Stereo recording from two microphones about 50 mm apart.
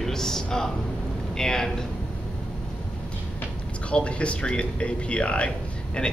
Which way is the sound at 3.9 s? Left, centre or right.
Left.